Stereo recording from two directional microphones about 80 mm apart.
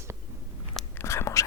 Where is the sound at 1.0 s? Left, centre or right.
Left.